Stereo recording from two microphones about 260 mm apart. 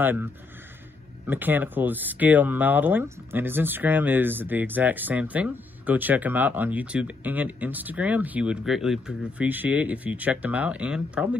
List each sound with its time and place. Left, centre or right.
0.0 s speech: centre